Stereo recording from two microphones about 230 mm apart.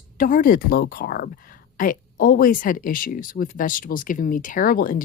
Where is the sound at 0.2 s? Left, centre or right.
Left.